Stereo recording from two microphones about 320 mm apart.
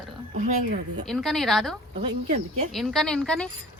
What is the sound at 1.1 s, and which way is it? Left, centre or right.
Speech, centre.